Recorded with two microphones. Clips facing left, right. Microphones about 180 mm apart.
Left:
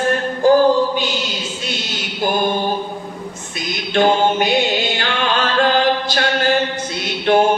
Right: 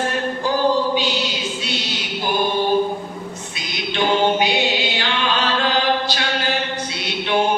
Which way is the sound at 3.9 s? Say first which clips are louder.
Left 3 dB; 50° left (ahead or behind).